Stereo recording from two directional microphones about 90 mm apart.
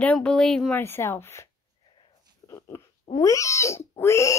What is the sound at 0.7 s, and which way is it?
Speech, 25° left (ahead or behind).